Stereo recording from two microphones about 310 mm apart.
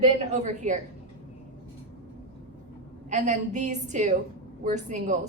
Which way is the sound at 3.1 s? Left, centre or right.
Right.